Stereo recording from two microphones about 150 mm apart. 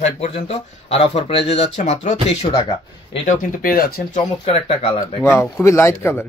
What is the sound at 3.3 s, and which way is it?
Speech, 75° left (ahead or behind).